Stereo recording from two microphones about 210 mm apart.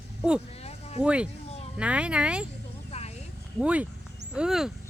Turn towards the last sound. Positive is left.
turn(degrees=0)  # may be behind; listen again after turning